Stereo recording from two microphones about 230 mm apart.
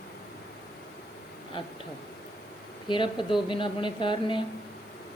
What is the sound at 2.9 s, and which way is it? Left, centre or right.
Speech, left.